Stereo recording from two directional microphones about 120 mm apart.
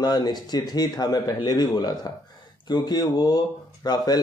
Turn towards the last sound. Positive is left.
turn(degrees=35)  # may be behind; listen again after turning